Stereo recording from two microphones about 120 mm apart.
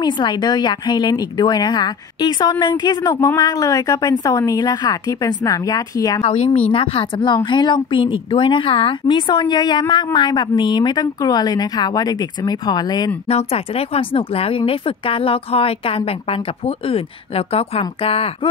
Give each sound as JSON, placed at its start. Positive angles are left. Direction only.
{"t": 0.0, "sound": "a woman's voice", "side_deg": 40}
{"t": 6.2, "sound": "a woman's voice", "side_deg": 55}
{"t": 13.3, "sound": "speech", "side_deg": 60}